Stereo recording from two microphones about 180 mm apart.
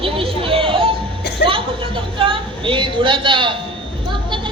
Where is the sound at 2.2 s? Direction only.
30° right (ahead or behind).